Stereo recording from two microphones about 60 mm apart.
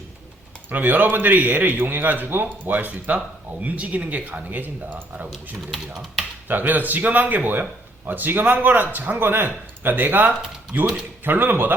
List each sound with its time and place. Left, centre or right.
0.7 s a man's voice: right
5.7 s speech: centre
6.5 s a man's voice: right